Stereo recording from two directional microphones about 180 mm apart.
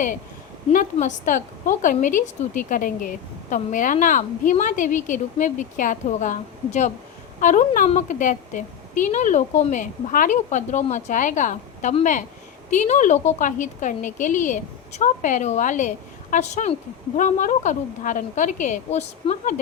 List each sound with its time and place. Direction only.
0.7 s a woman's voice: 45° left (ahead or behind)